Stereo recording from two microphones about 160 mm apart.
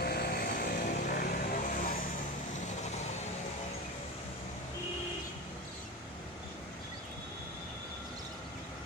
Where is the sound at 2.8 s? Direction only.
45° left (ahead or behind).